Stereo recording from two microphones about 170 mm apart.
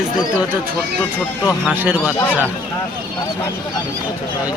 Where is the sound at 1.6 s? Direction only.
10° right (ahead or behind).